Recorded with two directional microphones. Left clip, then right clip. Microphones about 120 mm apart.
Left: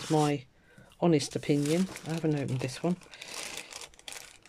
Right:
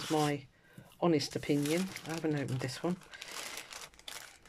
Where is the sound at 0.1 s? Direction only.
20° left (ahead or behind).